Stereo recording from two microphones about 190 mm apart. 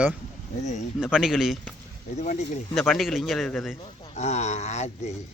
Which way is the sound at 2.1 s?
40° left (ahead or behind).